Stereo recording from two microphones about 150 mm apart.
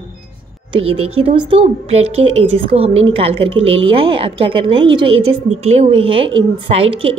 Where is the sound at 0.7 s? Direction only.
40° right (ahead or behind).